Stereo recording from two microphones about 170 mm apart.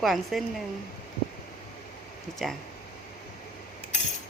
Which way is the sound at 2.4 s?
Centre (ahead or behind).